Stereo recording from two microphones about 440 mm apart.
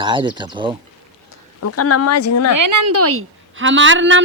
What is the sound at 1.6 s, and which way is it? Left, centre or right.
Speech, left.